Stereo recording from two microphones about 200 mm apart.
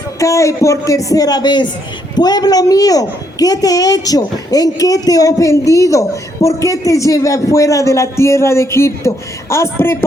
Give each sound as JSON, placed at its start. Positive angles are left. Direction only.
{"t": 0.2, "sound": "a woman's voice", "side_deg": 15}